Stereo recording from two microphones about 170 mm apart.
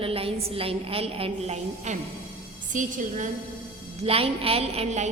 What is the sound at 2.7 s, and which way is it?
Speech, 50° right (ahead or behind).